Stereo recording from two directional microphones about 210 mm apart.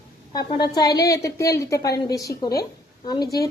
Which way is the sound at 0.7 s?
20° left (ahead or behind).